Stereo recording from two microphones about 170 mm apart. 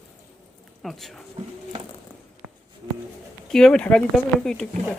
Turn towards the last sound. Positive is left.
turn(degrees=5)  # may be behind; listen again after turning